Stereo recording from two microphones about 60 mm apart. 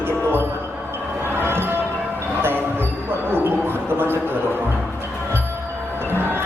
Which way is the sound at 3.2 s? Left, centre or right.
Right.